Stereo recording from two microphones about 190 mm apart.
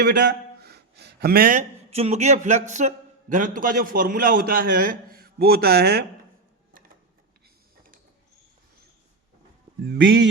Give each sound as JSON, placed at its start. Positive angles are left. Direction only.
{"t": 0.0, "sound": "a man's voice", "side_deg": -50}
{"t": 9.8, "sound": "speech", "side_deg": -60}